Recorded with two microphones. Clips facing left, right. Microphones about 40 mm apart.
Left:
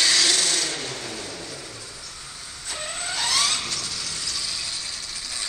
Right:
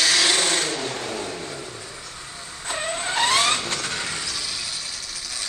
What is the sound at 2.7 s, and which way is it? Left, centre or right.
Vehicle, right.